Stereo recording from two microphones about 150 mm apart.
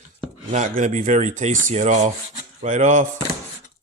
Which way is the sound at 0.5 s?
55° right (ahead or behind).